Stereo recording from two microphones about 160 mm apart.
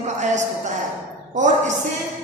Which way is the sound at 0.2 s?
50° right (ahead or behind).